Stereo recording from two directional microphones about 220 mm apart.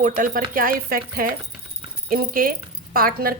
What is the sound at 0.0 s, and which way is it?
A woman's voice, 35° right (ahead or behind).